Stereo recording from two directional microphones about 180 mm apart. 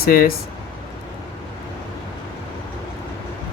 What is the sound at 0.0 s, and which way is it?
Speech, 55° left (ahead or behind).